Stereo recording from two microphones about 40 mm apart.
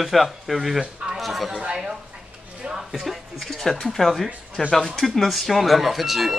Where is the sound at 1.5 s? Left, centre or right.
Right.